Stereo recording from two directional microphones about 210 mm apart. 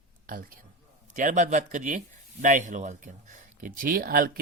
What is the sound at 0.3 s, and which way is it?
A man's voice, 40° right (ahead or behind).